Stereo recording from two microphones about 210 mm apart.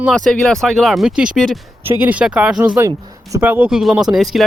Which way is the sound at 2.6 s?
15° right (ahead or behind).